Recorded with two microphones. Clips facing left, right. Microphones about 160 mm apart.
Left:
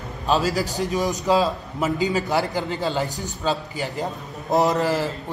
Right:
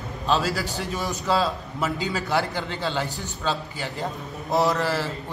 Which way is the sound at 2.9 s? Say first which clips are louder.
Left 3 dB; 40° left (ahead or behind).